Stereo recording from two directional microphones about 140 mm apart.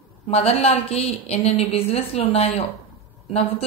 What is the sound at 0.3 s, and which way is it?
A woman's voice, 45° left (ahead or behind).